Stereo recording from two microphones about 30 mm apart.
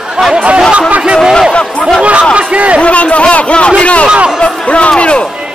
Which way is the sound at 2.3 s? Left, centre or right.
Right.